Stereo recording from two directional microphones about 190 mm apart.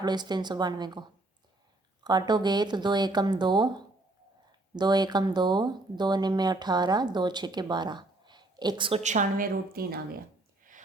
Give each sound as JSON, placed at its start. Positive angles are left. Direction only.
{"t": 0.0, "sound": "speech", "side_deg": -20}
{"t": 2.0, "sound": "speech", "side_deg": -20}
{"t": 9.0, "sound": "a woman's voice", "side_deg": -45}